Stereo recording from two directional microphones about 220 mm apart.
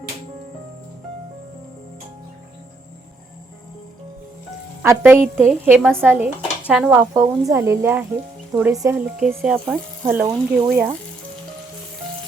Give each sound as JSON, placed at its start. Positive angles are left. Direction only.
{"t": 4.8, "sound": "speech", "side_deg": -10}